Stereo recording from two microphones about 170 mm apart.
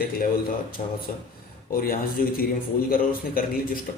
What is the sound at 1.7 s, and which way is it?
Speech, 60° left (ahead or behind).